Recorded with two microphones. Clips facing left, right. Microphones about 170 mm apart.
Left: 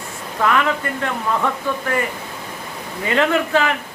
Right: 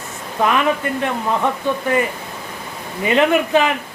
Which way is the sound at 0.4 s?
20° right (ahead or behind).